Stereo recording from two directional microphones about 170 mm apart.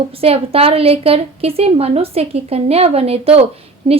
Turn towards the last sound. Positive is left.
turn(degrees=-35)  # may be behind; listen again after turning